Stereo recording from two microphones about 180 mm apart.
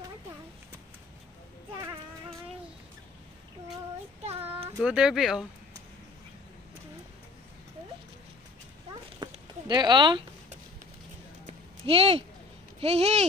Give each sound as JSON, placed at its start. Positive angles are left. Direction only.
{"t": 4.2, "sound": "child singing", "side_deg": -35}
{"t": 4.8, "sound": "speech", "side_deg": -5}
{"t": 9.2, "sound": "a sound", "side_deg": -25}
{"t": 9.7, "sound": "speech", "side_deg": -25}
{"t": 11.4, "sound": "a sound", "side_deg": -30}
{"t": 12.8, "sound": "speech", "side_deg": -35}